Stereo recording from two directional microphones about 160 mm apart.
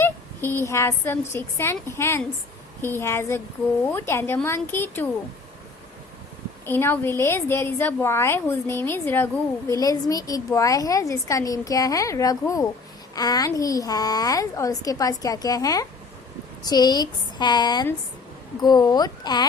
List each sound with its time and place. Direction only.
0.0 s a woman's voice: 15° left (ahead or behind)
6.7 s a woman's voice: 15° left (ahead or behind)